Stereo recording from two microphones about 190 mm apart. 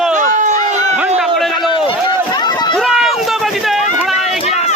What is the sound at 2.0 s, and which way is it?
Run, 20° left (ahead or behind).